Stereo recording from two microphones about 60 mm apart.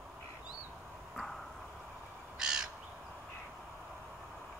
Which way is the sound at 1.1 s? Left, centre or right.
Centre.